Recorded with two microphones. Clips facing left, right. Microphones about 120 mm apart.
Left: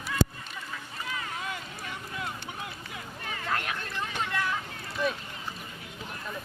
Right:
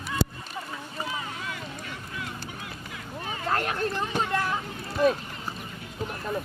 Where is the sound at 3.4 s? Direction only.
40° right (ahead or behind).